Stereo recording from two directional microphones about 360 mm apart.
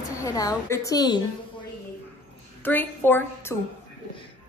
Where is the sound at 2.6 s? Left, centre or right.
Centre.